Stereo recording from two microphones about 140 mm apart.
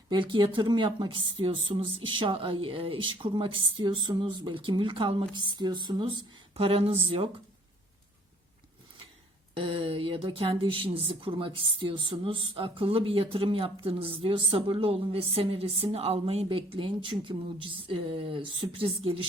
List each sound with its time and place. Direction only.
0.1 s speech: 35° right (ahead or behind)
6.5 s speech: 45° right (ahead or behind)
9.6 s speech: 40° right (ahead or behind)